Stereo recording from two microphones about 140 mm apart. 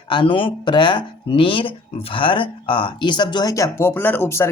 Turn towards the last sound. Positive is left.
turn(degrees=15)  # may be behind; listen again after turning